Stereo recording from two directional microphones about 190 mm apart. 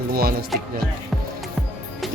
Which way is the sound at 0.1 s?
50° right (ahead or behind).